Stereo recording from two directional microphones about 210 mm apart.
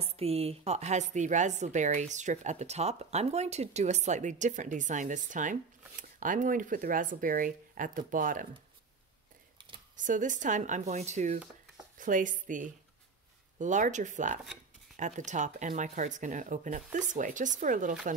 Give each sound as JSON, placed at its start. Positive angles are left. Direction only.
{"t": 0.0, "sound": "a woman's voice", "side_deg": -30}
{"t": 9.9, "sound": "a woman's voice", "side_deg": -35}